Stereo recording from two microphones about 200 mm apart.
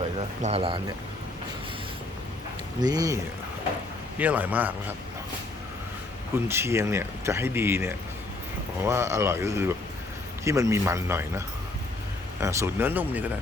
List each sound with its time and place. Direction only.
0.4 s speech: 30° right (ahead or behind)
2.8 s speech: 20° right (ahead or behind)
4.2 s speech: 10° right (ahead or behind)
6.3 s speech: 10° right (ahead or behind)